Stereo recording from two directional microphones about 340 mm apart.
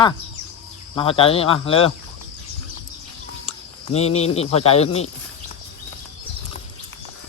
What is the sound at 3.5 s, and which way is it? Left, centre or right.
Speech, centre.